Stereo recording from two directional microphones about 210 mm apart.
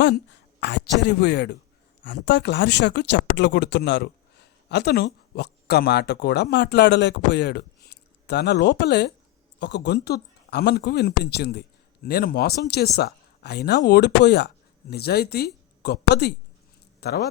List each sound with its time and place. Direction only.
0.0 s speech: 55° left (ahead or behind)